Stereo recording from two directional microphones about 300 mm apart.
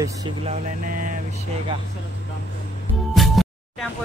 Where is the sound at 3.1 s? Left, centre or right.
Centre.